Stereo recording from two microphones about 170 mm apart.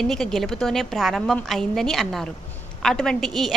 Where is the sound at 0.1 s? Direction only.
Centre (ahead or behind).